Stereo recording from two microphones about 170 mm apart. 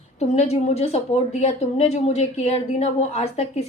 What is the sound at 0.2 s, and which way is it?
Speech, 40° left (ahead or behind).